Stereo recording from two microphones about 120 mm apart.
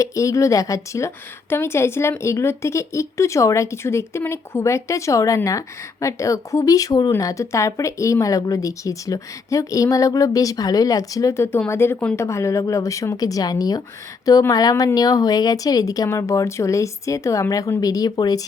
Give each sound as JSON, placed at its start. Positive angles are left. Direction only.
{"t": 0.0, "sound": "speech", "side_deg": 25}